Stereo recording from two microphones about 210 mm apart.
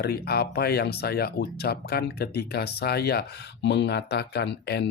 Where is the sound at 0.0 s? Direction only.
50° left (ahead or behind).